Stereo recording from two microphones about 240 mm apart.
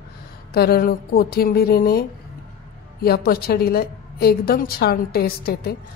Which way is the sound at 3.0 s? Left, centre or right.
Left.